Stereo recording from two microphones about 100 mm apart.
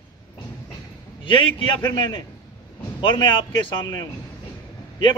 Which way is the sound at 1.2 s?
55° left (ahead or behind).